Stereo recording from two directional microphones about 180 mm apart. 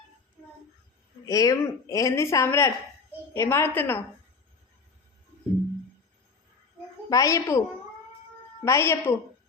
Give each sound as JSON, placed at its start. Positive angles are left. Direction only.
{"t": 1.2, "sound": "a woman's voice", "side_deg": 20}
{"t": 7.1, "sound": "a woman's voice", "side_deg": 20}
{"t": 8.6, "sound": "a woman's voice", "side_deg": 15}